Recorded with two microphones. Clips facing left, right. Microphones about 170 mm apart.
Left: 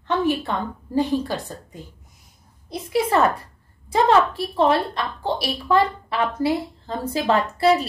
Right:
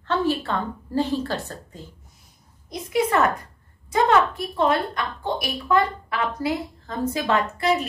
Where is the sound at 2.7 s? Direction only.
30° left (ahead or behind).